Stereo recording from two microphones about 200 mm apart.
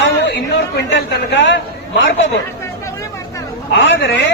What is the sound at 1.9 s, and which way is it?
Speech, 70° left (ahead or behind).